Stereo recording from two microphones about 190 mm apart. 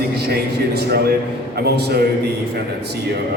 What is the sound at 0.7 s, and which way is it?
Speech, 60° right (ahead or behind).